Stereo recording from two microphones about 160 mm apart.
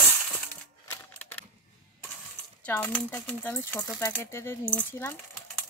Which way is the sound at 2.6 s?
10° left (ahead or behind).